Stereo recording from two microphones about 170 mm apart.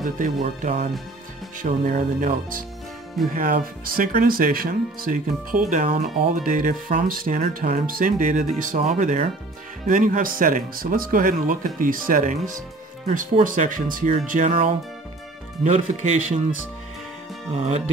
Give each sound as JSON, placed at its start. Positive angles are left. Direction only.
{"t": 0.0, "sound": "speech", "side_deg": -50}
{"t": 15.6, "sound": "speech", "side_deg": -40}
{"t": 17.6, "sound": "speech", "side_deg": -40}